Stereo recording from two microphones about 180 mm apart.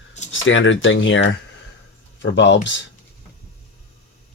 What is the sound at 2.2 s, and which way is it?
Speech, 80° left.